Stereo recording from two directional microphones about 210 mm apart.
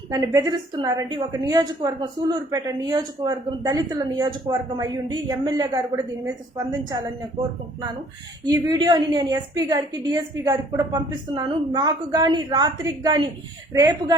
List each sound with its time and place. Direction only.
0.1 s a woman's voice: 15° right (ahead or behind)
8.4 s a woman's voice: 15° right (ahead or behind)